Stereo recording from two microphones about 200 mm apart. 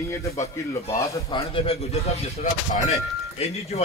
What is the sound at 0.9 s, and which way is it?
Speech, 15° left (ahead or behind).